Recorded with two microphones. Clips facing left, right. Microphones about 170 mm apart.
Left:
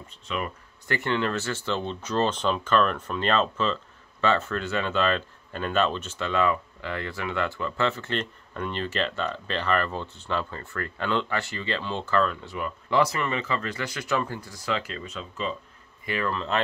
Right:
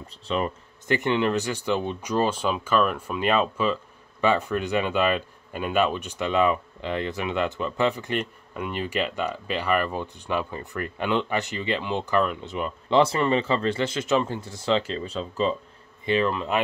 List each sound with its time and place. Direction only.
0.1 s speech: 30° right (ahead or behind)
0.8 s speech: 20° right (ahead or behind)
16.1 s speech: 20° right (ahead or behind)